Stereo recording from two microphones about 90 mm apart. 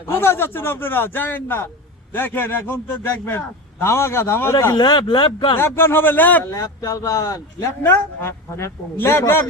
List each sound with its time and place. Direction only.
0.1 s a man's voice: 25° left (ahead or behind)
4.7 s speech: 50° left (ahead or behind)
5.5 s a man's voice: 25° left (ahead or behind)
6.5 s speech: 40° left (ahead or behind)
7.9 s a man's voice: 30° left (ahead or behind)